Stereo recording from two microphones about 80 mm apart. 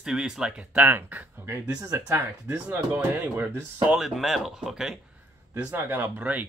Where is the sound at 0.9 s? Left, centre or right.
Right.